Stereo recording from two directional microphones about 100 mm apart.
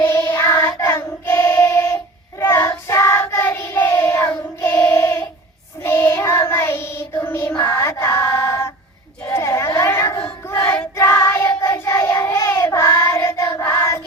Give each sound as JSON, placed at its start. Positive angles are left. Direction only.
{"t": 0.0, "sound": "child singing", "side_deg": 25}
{"t": 9.2, "sound": "a sound", "side_deg": 25}
{"t": 10.5, "sound": "child singing", "side_deg": 25}